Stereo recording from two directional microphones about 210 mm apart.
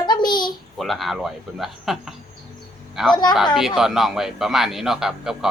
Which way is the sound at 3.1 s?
20° left (ahead or behind).